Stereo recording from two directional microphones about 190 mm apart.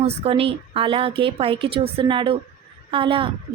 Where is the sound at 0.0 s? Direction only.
30° right (ahead or behind).